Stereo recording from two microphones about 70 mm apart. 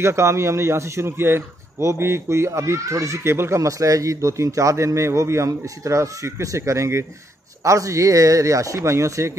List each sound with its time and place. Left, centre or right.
0.0 s a man's voice: right